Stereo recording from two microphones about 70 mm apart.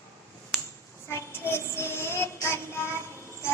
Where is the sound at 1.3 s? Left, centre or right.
Left.